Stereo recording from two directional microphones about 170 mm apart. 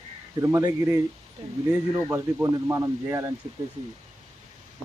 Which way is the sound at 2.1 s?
15° right (ahead or behind).